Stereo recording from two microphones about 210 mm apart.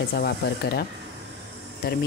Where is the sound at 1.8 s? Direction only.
45° left (ahead or behind).